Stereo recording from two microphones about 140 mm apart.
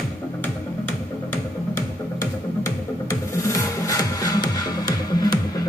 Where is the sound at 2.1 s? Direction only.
20° left (ahead or behind).